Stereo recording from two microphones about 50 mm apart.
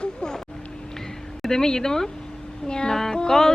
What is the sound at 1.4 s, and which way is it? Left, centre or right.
Speech, centre.